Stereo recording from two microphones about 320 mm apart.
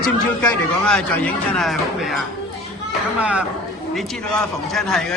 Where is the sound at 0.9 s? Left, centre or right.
Centre.